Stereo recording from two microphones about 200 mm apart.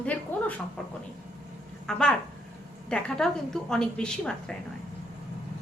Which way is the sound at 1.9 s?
5° left (ahead or behind).